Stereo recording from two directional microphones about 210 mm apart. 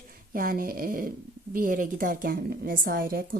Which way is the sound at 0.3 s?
45° right (ahead or behind).